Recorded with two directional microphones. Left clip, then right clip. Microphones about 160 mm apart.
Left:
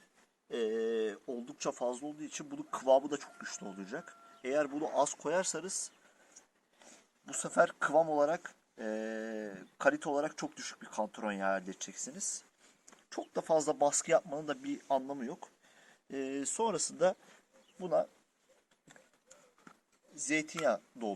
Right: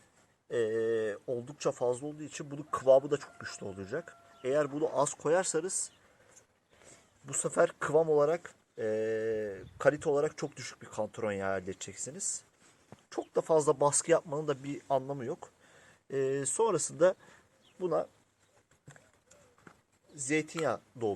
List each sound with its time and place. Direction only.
0.5 s speech: 60° right (ahead or behind)
7.3 s speech: 45° right (ahead or behind)
17.7 s speech: 55° right (ahead or behind)
18.9 s clip-clop: 40° right (ahead or behind)
20.1 s speech: 45° right (ahead or behind)